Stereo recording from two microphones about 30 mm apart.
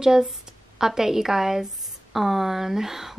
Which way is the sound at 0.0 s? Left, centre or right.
Centre.